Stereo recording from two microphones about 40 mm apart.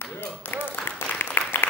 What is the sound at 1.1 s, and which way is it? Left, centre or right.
Applause, left.